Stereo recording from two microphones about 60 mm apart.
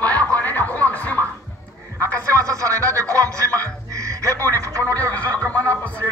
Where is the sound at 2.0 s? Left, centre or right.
Right.